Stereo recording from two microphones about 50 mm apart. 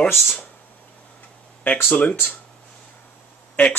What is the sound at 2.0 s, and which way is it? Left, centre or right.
Speech, left.